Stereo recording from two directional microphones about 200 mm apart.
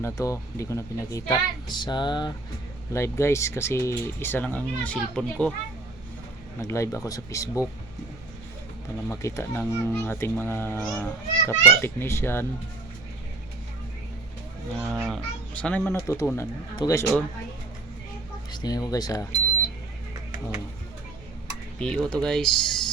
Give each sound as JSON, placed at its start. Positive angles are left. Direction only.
{"t": 0.0, "sound": "speech", "side_deg": 15}
{"t": 6.6, "sound": "speech", "side_deg": 15}
{"t": 9.0, "sound": "speech", "side_deg": 15}
{"t": 14.8, "sound": "speech", "side_deg": -5}
{"t": 18.5, "sound": "speech", "side_deg": 20}
{"t": 21.8, "sound": "speech", "side_deg": 5}